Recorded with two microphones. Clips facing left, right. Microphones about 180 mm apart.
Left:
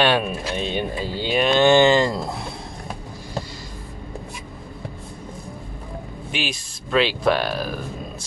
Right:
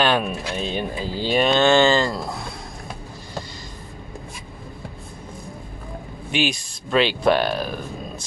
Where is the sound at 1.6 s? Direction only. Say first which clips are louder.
Left 4 dB; 15° left (ahead or behind).